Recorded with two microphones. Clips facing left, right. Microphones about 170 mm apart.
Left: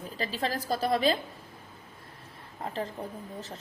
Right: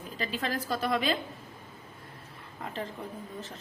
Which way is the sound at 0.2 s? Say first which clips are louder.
Left 1 dB; 35° left (ahead or behind).